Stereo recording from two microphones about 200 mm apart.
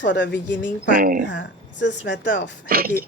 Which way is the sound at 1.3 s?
65° left (ahead or behind).